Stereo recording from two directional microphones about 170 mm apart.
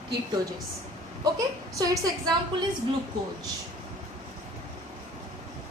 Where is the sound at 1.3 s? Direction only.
20° right (ahead or behind).